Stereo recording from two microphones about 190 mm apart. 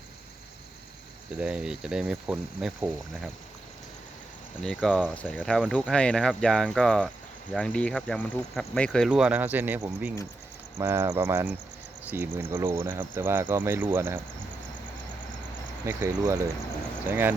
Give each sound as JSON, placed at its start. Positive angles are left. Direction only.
{"t": 1.4, "sound": "speech", "side_deg": -5}
{"t": 4.6, "sound": "speech", "side_deg": 5}
{"t": 15.9, "sound": "speech", "side_deg": -15}